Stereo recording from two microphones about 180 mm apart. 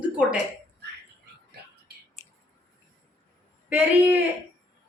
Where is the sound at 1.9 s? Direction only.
65° right (ahead or behind).